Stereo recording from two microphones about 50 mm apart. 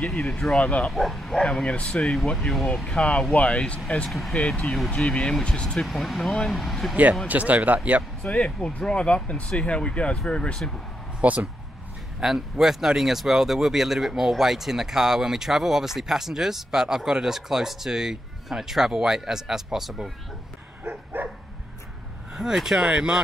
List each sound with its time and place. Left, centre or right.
0.0 s speech: centre
0.6 s speech: left
0.8 s speech: centre
1.4 s speech: centre
2.4 s speech: centre
3.3 s speech: left
4.9 s speech: centre
5.8 s speech: centre
7.2 s speech: right
8.3 s speech: left
11.1 s speech: right
12.2 s speech: centre
20.8 s dog: right
22.3 s speech: centre